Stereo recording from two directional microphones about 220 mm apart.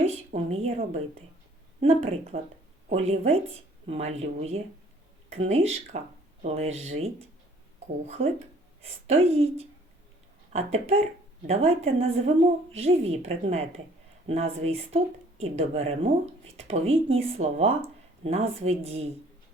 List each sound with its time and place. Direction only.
0.0 s a woman's voice: 30° right (ahead or behind)
8.8 s speech: 30° right (ahead or behind)